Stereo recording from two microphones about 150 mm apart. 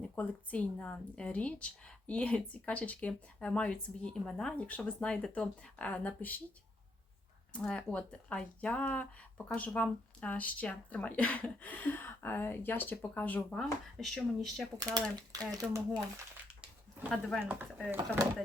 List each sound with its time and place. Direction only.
0.0 s a woman's voice: 10° left (ahead or behind)
7.5 s a woman's voice: 5° left (ahead or behind)
15.3 s speech: 20° right (ahead or behind)
17.1 s speech: 5° left (ahead or behind)
17.4 s speech: 10° right (ahead or behind)